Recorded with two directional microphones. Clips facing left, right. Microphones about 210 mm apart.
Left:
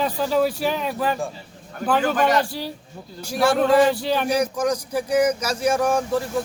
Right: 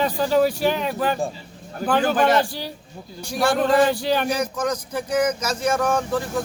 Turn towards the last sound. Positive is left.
turn(degrees=10)  # may be behind; listen again after turning